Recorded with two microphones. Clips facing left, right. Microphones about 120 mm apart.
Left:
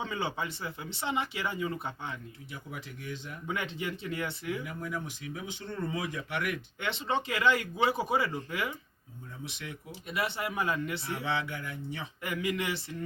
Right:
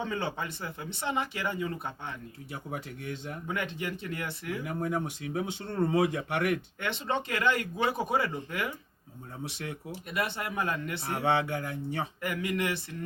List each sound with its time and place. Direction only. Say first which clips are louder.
0.1 s speech: right 1 dB; 50° right (ahead or behind)
2.5 s speech: right 5 dB; 30° right (ahead or behind)
3.5 s speech: even; 50° right (ahead or behind)
4.4 s speech: right 3 dB; 35° right (ahead or behind)
5.7 s speech: right 8 dB; 55° right (ahead or behind)
6.0 s speech: right 7 dB; 30° right (ahead or behind)
6.8 s speech: left 1 dB; 50° right (ahead or behind)
9.4 s speech: right 5 dB; 50° right (ahead or behind)